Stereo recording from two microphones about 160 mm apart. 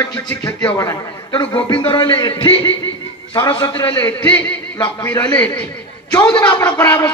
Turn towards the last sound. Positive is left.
turn(degrees=15)  # may be behind; listen again after turning